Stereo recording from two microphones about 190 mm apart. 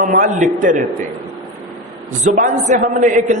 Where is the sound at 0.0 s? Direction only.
40° right (ahead or behind).